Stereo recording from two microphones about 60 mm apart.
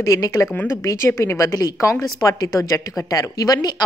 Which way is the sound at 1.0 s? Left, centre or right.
Left.